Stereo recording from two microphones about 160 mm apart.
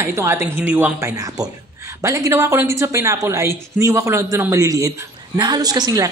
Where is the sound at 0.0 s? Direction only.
15° right (ahead or behind).